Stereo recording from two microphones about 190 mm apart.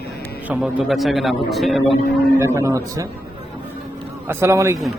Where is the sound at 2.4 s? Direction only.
15° right (ahead or behind).